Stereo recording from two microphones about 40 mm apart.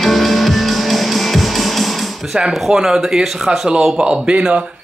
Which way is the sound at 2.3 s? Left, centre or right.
Centre.